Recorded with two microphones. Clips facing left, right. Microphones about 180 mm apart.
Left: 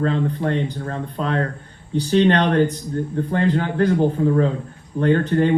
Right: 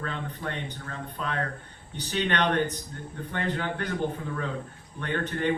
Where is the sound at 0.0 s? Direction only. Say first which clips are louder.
Left 13 dB; 35° left (ahead or behind).